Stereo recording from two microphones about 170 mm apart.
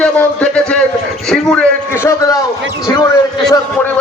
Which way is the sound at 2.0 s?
20° left (ahead or behind).